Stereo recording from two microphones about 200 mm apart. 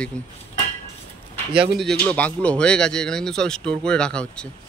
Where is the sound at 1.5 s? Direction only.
55° right (ahead or behind).